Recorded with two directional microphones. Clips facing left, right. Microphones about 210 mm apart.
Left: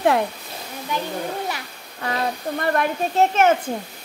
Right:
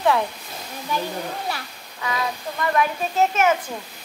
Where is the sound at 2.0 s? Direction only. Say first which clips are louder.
Left 2 dB; 50° left (ahead or behind).